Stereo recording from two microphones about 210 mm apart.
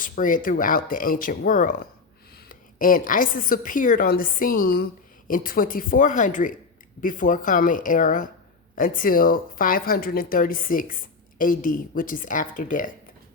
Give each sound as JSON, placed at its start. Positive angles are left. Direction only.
{"t": 0.0, "sound": "speech", "side_deg": 40}